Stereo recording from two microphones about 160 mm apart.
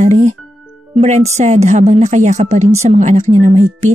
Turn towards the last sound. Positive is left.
turn(degrees=-45)  # may be behind; listen again after turning